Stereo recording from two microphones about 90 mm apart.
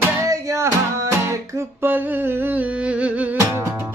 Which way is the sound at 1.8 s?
25° right (ahead or behind).